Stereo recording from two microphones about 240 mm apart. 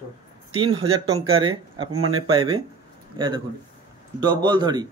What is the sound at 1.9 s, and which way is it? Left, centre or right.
Speech, right.